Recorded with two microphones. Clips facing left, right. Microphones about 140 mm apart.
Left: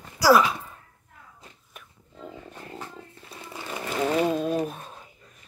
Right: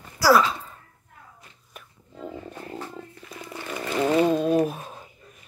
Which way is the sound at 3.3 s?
30° left (ahead or behind).